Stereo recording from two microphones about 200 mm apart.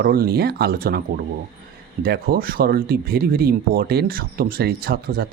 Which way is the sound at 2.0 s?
50° right (ahead or behind).